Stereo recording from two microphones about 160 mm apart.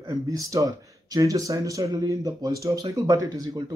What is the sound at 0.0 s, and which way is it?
Speech, 25° right (ahead or behind).